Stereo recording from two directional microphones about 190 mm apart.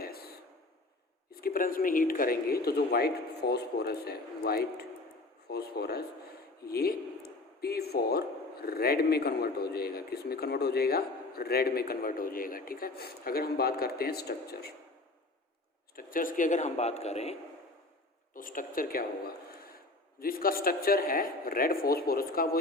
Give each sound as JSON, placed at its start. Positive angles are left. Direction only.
{"t": 0.0, "sound": "a sound", "side_deg": 55}
{"t": 1.3, "sound": "speech", "side_deg": 50}
{"t": 16.0, "sound": "speech", "side_deg": 45}
{"t": 18.3, "sound": "a man's voice", "side_deg": 45}